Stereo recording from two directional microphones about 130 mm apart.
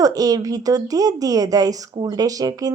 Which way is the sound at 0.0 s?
30° right (ahead or behind).